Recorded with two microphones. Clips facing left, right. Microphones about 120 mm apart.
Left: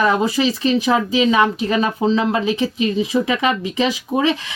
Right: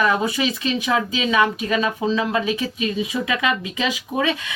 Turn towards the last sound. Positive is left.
turn(degrees=30)  # may be behind; listen again after turning